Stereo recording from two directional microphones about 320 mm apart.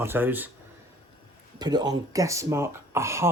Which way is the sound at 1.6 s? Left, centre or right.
Centre.